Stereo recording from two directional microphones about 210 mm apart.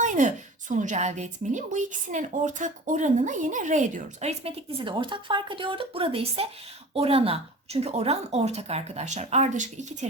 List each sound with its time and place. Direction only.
0.0 s a woman's voice: 35° right (ahead or behind)